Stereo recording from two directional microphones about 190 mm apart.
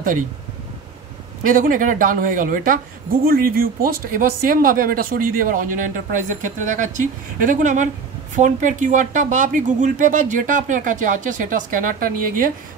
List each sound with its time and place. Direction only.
1.4 s a man's voice: 45° right (ahead or behind)